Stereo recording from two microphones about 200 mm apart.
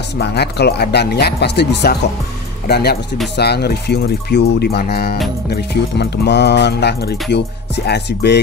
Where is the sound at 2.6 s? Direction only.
55° left (ahead or behind).